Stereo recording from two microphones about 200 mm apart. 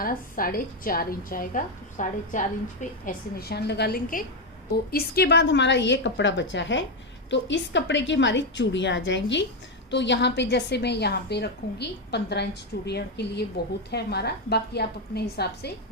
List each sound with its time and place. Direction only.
0.0 s a woman's voice: 45° left (ahead or behind)
3.1 s a woman's voice: 50° left (ahead or behind)